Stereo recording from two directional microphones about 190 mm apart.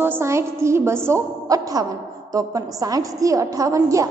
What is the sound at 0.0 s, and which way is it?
A woman's voice, 15° right (ahead or behind).